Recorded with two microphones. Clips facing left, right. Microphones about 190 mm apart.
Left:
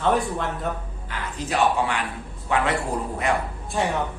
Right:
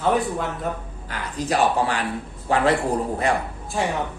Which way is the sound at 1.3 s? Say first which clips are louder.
Right 2 dB; 40° right (ahead or behind).